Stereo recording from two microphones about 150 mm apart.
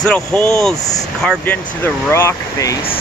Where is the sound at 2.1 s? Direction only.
20° left (ahead or behind).